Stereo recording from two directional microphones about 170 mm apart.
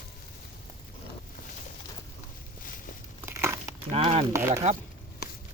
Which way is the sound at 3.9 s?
35° right (ahead or behind).